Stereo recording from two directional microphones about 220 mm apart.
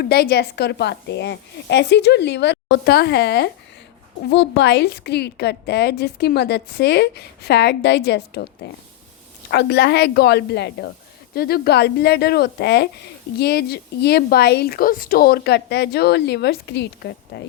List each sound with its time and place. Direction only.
0.0 s a woman's voice: 45° left (ahead or behind)